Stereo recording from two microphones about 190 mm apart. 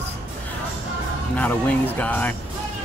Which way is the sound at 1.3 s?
5° left (ahead or behind).